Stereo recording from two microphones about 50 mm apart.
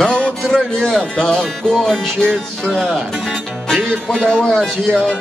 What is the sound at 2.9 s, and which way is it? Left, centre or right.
Music, centre.